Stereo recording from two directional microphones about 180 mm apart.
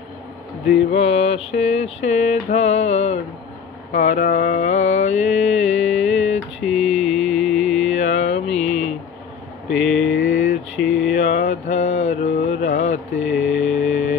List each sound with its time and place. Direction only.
0.9 s mantra: 35° left (ahead or behind)
6.6 s mantra: centre (ahead or behind)
8.0 s mantra: 40° left (ahead or behind)
8.5 s mantra: centre (ahead or behind)
9.7 s a sound: centre (ahead or behind)
10.0 s mantra: 45° left (ahead or behind)
10.8 s a sound: centre (ahead or behind)
11.1 s mantra: 45° left (ahead or behind)
13.2 s mantra: centre (ahead or behind)
13.7 s music: 45° left (ahead or behind)